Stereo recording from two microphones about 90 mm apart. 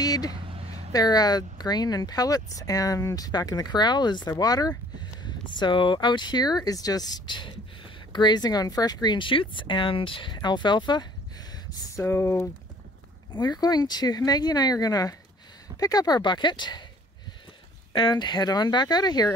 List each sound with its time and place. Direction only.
0.0 s vehicle: 45° left (ahead or behind)
0.9 s speech: 45° left (ahead or behind)
4.3 s speech: 45° left (ahead or behind)
5.2 s speech: 55° left (ahead or behind)
12.0 s speech: 30° left (ahead or behind)
13.3 s speech: 50° left (ahead or behind)
18.1 s speech: 50° left (ahead or behind)